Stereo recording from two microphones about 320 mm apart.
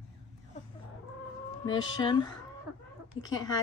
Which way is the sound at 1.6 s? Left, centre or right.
Centre.